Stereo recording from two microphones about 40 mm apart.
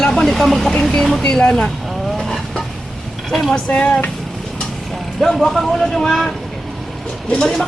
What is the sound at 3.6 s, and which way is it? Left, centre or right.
Speech, left.